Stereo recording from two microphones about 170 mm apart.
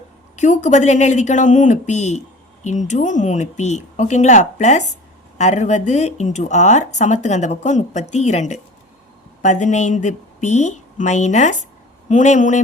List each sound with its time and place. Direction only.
0.3 s speech: 45° left (ahead or behind)